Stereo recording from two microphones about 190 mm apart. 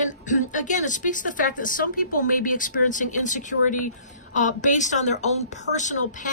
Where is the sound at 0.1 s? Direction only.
40° left (ahead or behind).